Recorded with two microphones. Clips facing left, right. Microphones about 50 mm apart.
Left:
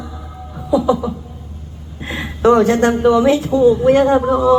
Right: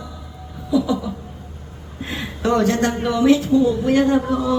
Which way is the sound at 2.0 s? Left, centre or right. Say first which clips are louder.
Left 8 dB; left.